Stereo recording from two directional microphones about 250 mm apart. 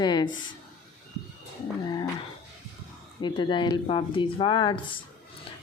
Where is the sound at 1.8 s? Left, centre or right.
Centre.